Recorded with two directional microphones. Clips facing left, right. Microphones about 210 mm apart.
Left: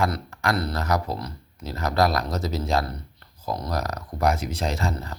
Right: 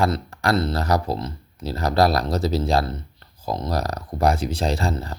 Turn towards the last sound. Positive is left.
turn(degrees=-30)  # may be behind; listen again after turning